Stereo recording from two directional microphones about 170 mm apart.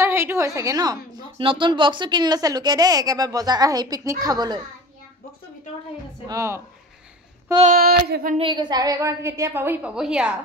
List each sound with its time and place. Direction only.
0.0 s a woman's voice: 15° right (ahead or behind)
6.2 s a woman's voice: 20° right (ahead or behind)
7.7 s a sound: 65° right (ahead or behind)
8.4 s a woman's voice: 25° right (ahead or behind); by 10.3 s 5° right (ahead or behind)